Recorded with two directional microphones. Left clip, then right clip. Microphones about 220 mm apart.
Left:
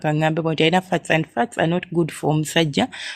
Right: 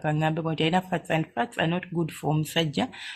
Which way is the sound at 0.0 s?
30° left (ahead or behind).